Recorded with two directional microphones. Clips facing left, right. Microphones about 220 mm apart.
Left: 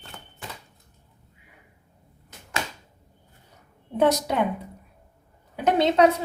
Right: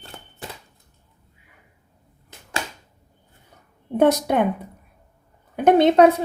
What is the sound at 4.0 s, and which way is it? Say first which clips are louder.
Speech: right 4 dB; 55° right (ahead or behind).